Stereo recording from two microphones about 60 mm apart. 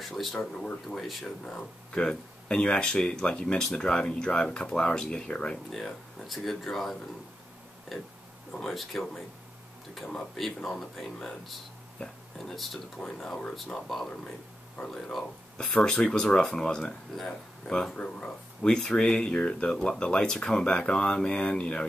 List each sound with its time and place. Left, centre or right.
0.0 s speech: centre
0.4 s speech: centre
10.3 s speech: centre
13.8 s speech: centre